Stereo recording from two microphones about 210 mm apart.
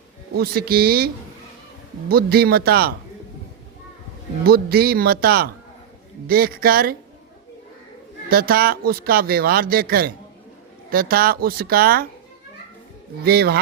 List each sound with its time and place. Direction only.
0.3 s speech: 45° right (ahead or behind)
4.4 s speech: 45° right (ahead or behind)
8.3 s speech: 45° right (ahead or behind)
13.2 s speech: 50° right (ahead or behind)